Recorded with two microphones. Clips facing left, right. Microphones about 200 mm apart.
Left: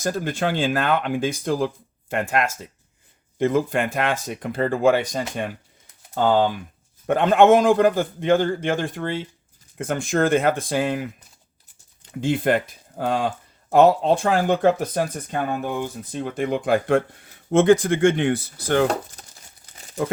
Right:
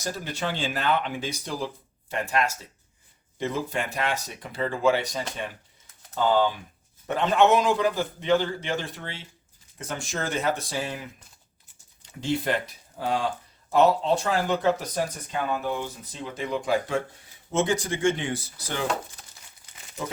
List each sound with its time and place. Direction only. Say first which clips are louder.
0.0 s speech: left 7 dB; 50° left (ahead or behind)
12.2 s speech: left 6 dB; 50° left (ahead or behind)
19.2 s crumpling: left 4 dB; 40° left (ahead or behind)